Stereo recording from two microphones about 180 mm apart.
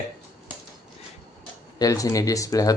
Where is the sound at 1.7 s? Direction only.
20° left (ahead or behind).